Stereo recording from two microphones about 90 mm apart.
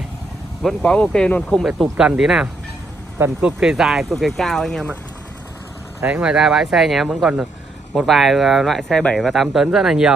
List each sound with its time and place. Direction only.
0.6 s speech: 10° left (ahead or behind)
1.6 s speech: 5° right (ahead or behind)
3.2 s speech: 25° right (ahead or behind)
3.6 s speech: 5° right (ahead or behind)
6.2 s speech: 5° right (ahead or behind)